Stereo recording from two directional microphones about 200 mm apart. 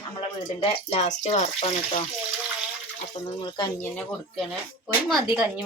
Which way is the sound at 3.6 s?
10° left (ahead or behind).